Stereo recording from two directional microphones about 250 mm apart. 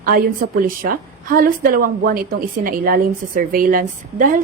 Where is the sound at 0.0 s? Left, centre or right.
Right.